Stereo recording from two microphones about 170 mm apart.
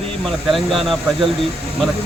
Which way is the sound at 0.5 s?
Centre (ahead or behind).